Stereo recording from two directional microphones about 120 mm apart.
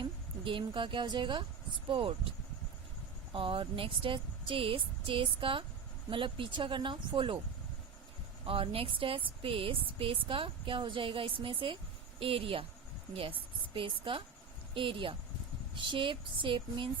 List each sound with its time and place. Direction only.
0.0 s a woman's voice: 45° right (ahead or behind)
3.3 s a woman's voice: 45° right (ahead or behind)
8.4 s a woman's voice: 50° right (ahead or behind)